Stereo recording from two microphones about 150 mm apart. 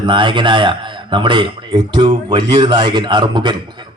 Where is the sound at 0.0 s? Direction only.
30° right (ahead or behind).